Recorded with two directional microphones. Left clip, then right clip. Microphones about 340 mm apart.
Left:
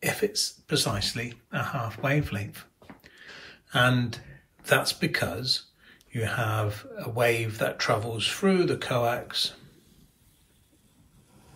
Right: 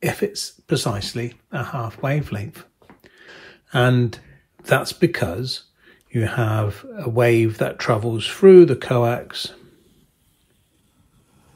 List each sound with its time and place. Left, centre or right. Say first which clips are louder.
0.0 s speech: right 3 dB; centre